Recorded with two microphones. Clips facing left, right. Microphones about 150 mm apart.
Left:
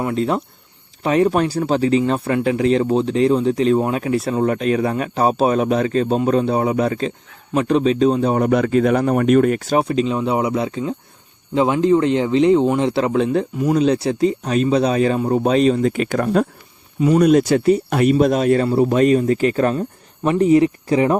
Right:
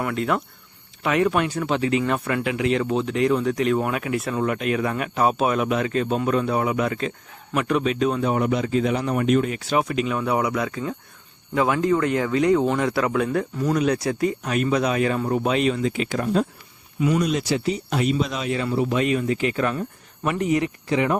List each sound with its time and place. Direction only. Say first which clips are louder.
0.0 s speech: left 4 dB; 30° left (ahead or behind)
8.4 s speech: left 6 dB; 60° left (ahead or behind); by 15.9 s 35° left (ahead or behind)
15.9 s speech: left 5 dB; 55° left (ahead or behind); by 21.2 s 35° left (ahead or behind)